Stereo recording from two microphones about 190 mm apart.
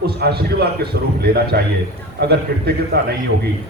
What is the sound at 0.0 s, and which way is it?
A man's voice, 55° right (ahead or behind).